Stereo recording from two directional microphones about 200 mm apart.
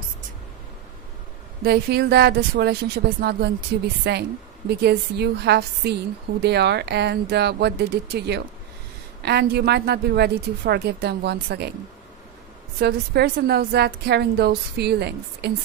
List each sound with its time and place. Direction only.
1.6 s a woman's voice: 55° right (ahead or behind)
12.8 s a woman's voice: 55° right (ahead or behind)